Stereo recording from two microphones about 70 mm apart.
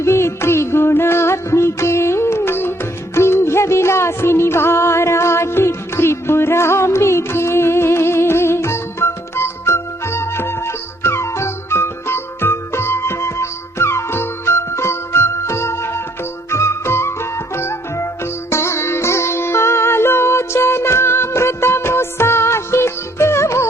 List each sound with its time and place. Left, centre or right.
0.0 s music: left